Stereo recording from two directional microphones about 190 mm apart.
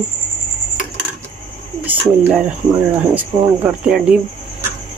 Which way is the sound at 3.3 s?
20° right (ahead or behind).